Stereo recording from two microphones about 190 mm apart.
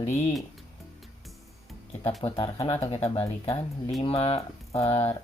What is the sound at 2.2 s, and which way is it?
Speech, 30° left (ahead or behind).